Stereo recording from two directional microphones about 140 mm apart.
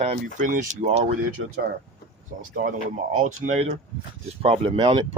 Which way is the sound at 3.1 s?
60° right (ahead or behind).